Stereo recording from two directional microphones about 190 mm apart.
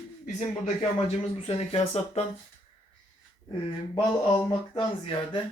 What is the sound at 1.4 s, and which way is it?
Speech, 30° left (ahead or behind).